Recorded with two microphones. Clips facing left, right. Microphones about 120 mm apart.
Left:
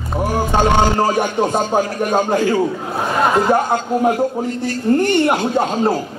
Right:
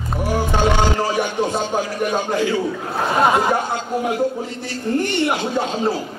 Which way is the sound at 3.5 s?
45° left (ahead or behind).